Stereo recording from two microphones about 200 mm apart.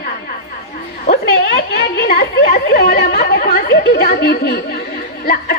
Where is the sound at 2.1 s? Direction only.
45° left (ahead or behind).